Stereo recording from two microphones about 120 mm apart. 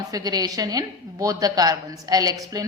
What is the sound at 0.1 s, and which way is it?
A woman's voice, 35° right (ahead or behind).